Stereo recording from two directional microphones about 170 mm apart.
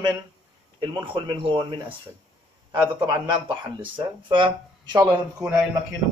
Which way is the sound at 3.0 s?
25° right (ahead or behind).